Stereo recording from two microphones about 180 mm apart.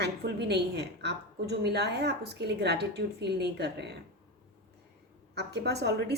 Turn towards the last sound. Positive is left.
turn(degrees=-70)  # may be behind; listen again after turning